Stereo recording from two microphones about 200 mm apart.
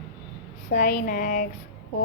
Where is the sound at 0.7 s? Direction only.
45° left (ahead or behind).